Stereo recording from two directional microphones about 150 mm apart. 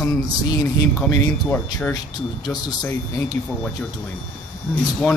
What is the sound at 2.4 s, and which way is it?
Speech, 25° left (ahead or behind).